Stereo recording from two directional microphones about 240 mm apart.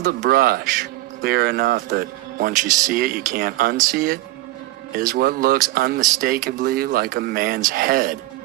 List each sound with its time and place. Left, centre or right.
0.0 s speech: right